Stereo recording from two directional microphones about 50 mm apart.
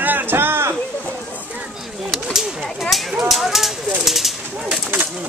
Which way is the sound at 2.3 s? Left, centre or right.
Centre.